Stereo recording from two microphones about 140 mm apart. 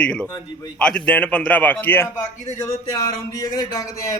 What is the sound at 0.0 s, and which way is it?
Speech, 10° left (ahead or behind).